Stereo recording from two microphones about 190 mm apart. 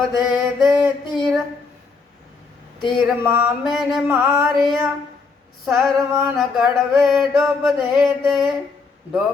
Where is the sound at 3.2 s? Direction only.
10° right (ahead or behind).